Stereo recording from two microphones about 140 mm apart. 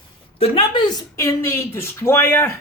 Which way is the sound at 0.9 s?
20° left (ahead or behind).